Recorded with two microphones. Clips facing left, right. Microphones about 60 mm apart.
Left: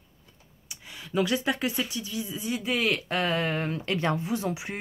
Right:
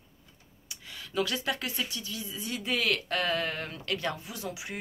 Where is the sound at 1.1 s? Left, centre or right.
Left.